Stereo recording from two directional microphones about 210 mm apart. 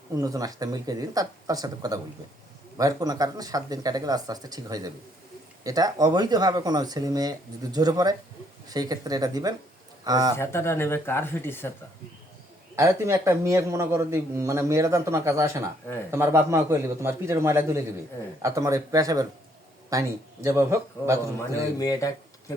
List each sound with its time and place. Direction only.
0.2 s a man's voice: 15° right (ahead or behind)
10.3 s speech: 10° left (ahead or behind)
12.7 s a man's voice: 15° right (ahead or behind)
21.8 s speech: 15° left (ahead or behind)